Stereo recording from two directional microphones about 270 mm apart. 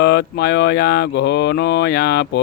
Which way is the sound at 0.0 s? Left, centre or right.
Left.